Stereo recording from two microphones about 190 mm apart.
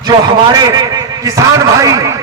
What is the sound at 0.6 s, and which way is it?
A man's voice, 20° right (ahead or behind).